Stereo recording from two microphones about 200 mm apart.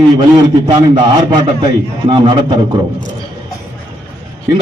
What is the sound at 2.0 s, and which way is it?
Speech, 25° right (ahead or behind).